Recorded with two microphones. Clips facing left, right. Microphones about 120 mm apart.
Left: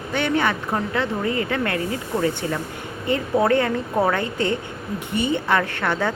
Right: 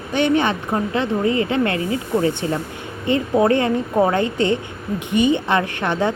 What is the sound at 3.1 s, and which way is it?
A woman's voice, 20° right (ahead or behind).